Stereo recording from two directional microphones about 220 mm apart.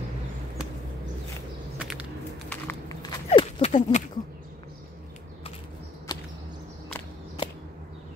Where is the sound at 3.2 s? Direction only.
25° left (ahead or behind).